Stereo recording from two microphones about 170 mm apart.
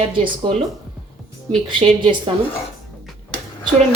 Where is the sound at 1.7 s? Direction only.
30° right (ahead or behind).